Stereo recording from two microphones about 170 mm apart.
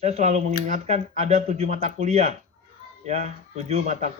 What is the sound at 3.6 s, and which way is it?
Speech, 40° right (ahead or behind).